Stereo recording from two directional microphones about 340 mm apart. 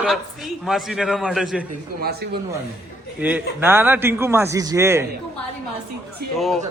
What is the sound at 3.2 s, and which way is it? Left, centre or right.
A man's voice, centre.